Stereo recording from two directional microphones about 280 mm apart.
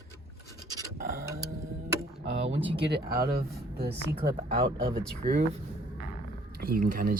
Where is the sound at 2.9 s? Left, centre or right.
Right.